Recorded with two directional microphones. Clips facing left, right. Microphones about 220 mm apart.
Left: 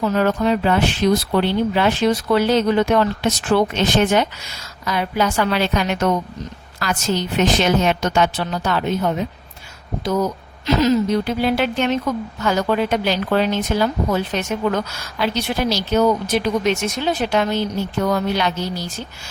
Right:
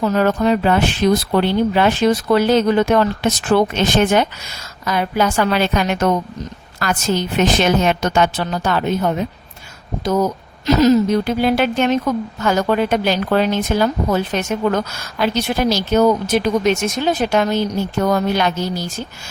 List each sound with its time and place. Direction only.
0.0 s a woman's voice: 45° right (ahead or behind)